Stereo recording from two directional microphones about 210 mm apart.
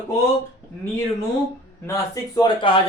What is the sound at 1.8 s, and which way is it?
Speech, 15° left (ahead or behind).